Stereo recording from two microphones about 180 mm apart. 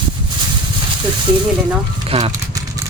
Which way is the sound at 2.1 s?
35° right (ahead or behind).